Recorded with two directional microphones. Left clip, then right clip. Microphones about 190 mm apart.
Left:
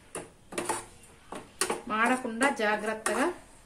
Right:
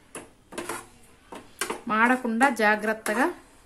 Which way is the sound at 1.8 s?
65° right (ahead or behind).